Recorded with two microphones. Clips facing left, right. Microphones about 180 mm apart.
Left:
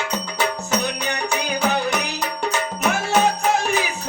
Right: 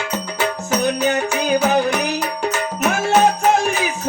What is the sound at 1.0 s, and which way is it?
Music, 45° right (ahead or behind).